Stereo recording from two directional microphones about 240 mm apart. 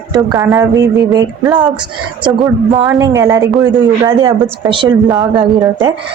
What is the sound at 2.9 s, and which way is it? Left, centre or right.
A woman's voice, centre.